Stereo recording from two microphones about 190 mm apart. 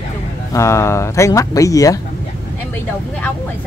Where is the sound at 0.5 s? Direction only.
15° left (ahead or behind).